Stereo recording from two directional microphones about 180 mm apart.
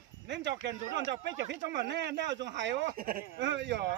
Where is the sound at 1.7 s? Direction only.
75° right (ahead or behind).